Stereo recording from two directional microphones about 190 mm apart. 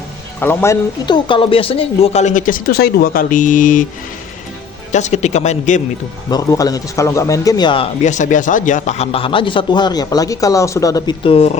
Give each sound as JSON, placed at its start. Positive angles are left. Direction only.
{"t": 0.3, "sound": "speech", "side_deg": 10}
{"t": 4.9, "sound": "speech", "side_deg": 40}
{"t": 6.3, "sound": "a man's voice", "side_deg": 20}
{"t": 8.0, "sound": "a man's voice", "side_deg": 40}